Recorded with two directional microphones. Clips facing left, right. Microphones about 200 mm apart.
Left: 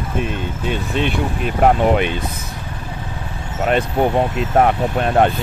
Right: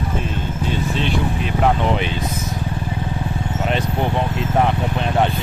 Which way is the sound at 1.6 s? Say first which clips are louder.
Left 5 dB; 55° left (ahead or behind).